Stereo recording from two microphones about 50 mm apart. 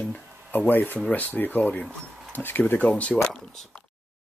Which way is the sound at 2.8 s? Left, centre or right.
Left.